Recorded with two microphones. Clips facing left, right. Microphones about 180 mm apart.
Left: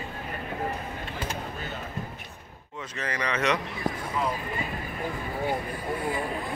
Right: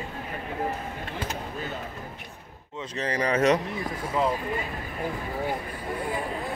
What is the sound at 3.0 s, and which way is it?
Speech, 35° right (ahead or behind).